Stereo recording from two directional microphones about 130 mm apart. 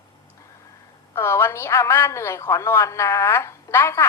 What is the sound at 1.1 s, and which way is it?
A woman's voice, 20° left (ahead or behind).